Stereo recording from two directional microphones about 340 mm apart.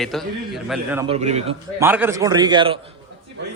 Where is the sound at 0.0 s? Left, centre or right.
Centre.